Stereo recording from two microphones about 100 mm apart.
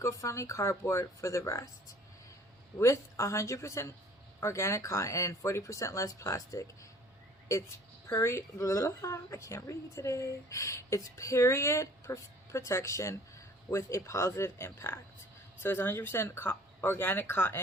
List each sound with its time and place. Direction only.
0.0 s a woman's voice: 30° left (ahead or behind)
8.0 s a woman's voice: 25° left (ahead or behind)